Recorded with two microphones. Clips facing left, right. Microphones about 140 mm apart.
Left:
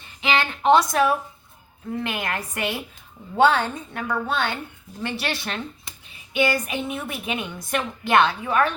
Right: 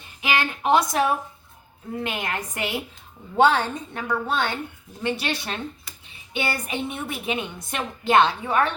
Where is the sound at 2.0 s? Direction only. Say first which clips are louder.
Left 1 dB; 20° right (ahead or behind).